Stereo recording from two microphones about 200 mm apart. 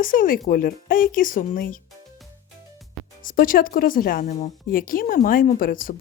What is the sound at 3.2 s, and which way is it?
A woman's voice, 45° left (ahead or behind).